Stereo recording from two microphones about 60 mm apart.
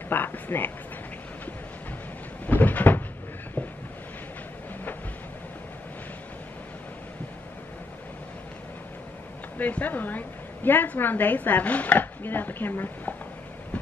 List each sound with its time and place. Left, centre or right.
0.1 s a woman's voice: left
2.4 s cupboard open or close: left
3.6 s a sound: left
9.6 s a woman's voice: left